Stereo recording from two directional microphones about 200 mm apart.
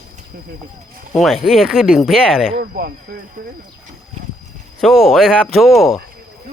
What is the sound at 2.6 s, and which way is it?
Speech, 50° right (ahead or behind).